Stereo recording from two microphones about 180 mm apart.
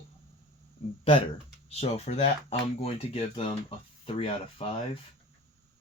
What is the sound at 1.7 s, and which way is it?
Speech, 35° left (ahead or behind).